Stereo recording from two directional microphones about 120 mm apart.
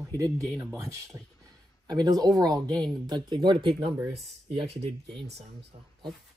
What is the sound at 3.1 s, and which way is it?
Speech, 40° right (ahead or behind).